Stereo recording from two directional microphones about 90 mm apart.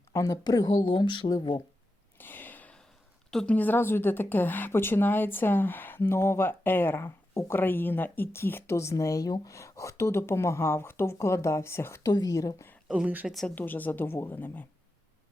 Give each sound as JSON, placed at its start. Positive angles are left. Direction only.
{"t": 0.1, "sound": "speech", "side_deg": 40}
{"t": 2.1, "sound": "a sound", "side_deg": 20}
{"t": 3.2, "sound": "a woman's voice", "side_deg": 10}
{"t": 12.1, "sound": "speech", "side_deg": 45}
{"t": 12.9, "sound": "speech", "side_deg": -15}
{"t": 13.2, "sound": "speech", "side_deg": 0}
{"t": 13.6, "sound": "a woman's voice", "side_deg": 20}